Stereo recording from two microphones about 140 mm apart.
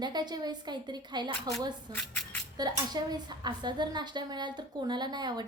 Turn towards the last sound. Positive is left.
turn(degrees=-30)  # may be behind; listen again after turning